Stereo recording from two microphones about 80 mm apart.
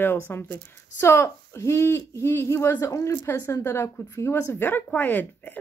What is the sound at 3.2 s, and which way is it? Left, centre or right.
Speech, left.